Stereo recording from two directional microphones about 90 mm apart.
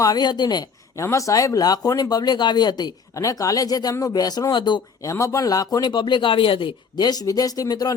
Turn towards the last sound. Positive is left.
turn(degrees=45)  # may be behind; listen again after turning